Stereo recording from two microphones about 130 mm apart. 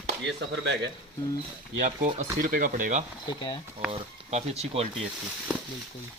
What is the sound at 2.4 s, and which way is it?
Speech, 90° right.